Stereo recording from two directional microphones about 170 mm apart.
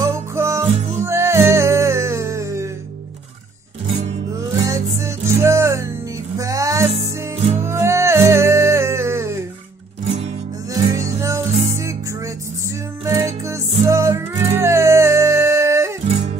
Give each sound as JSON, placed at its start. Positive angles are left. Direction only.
{"t": 0.0, "sound": "music", "side_deg": -20}
{"t": 4.6, "sound": "music", "side_deg": -15}
{"t": 6.9, "sound": "music", "side_deg": -45}
{"t": 7.6, "sound": "music", "side_deg": -15}
{"t": 10.0, "sound": "music", "side_deg": -40}
{"t": 10.7, "sound": "music", "side_deg": -20}
{"t": 13.0, "sound": "music", "side_deg": -20}